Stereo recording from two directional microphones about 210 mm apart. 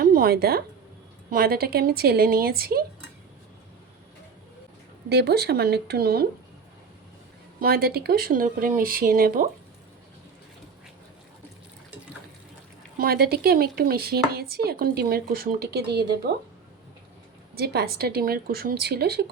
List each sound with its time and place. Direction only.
0.0 s a woman's voice: 45° right (ahead or behind)
5.0 s speech: 50° right (ahead or behind)
7.6 s speech: 45° right (ahead or behind)
13.0 s speech: 45° right (ahead or behind)
17.5 s speech: 45° right (ahead or behind)